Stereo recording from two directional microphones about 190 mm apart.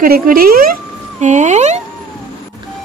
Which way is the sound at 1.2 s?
40° right (ahead or behind).